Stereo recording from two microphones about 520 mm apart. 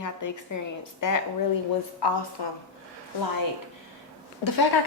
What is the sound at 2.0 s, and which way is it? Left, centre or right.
Speech, left.